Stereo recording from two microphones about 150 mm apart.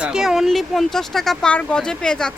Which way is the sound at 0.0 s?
5° right (ahead or behind).